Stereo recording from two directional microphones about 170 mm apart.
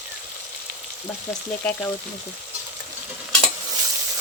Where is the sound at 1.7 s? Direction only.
10° left (ahead or behind).